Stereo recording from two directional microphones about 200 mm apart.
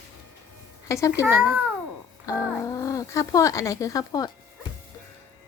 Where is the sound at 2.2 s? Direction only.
15° left (ahead or behind).